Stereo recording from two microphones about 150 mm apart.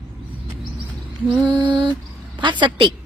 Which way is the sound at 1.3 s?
30° right (ahead or behind).